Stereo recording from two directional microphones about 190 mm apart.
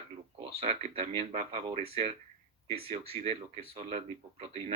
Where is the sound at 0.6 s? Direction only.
30° right (ahead or behind).